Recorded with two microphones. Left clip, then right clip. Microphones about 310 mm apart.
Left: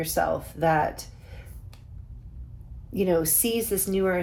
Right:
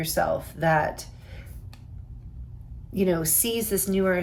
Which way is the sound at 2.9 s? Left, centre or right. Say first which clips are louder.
Left 1 dB; centre.